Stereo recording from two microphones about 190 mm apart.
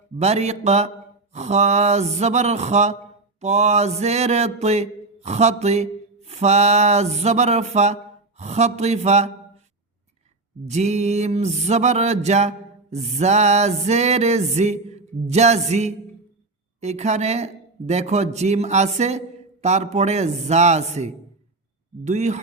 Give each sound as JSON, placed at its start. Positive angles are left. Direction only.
{"t": 0.2, "sound": "music", "side_deg": -35}
{"t": 10.7, "sound": "music", "side_deg": -35}